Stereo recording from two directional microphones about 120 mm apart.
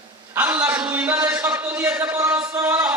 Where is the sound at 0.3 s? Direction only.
15° right (ahead or behind).